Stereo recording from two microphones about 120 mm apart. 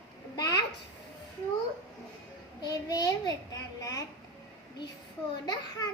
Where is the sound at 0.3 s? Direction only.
30° left (ahead or behind).